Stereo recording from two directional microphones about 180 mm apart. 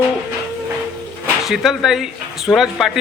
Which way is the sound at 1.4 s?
Centre (ahead or behind).